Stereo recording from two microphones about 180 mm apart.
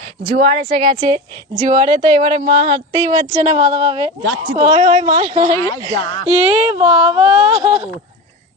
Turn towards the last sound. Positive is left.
turn(degrees=-30)  # may be behind; listen again after turning